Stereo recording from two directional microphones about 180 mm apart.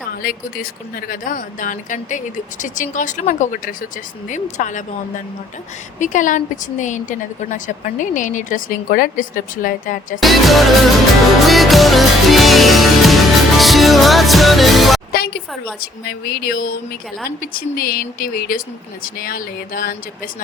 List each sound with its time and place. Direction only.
0.2 s a woman's voice: 55° left (ahead or behind)
6.0 s a woman's voice: 45° left (ahead or behind)
10.2 s music: centre (ahead or behind)
15.1 s a sound: 60° left (ahead or behind)
15.8 s a woman's voice: 60° left (ahead or behind)